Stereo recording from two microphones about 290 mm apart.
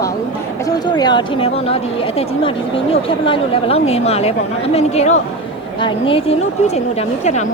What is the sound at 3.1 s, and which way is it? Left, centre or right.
A woman's voice, centre.